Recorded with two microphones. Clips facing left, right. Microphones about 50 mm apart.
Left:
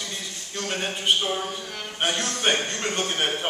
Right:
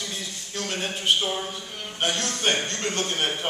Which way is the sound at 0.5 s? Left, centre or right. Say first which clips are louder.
Left 1 dB; centre.